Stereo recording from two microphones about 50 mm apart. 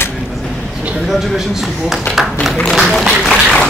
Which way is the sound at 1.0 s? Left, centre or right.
Centre.